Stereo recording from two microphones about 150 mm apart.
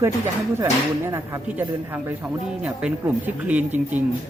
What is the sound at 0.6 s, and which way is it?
Speech, 20° right (ahead or behind).